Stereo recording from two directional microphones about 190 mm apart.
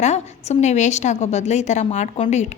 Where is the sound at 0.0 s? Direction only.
35° left (ahead or behind).